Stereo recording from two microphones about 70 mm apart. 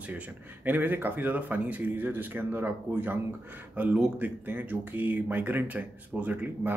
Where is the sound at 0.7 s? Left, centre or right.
Right.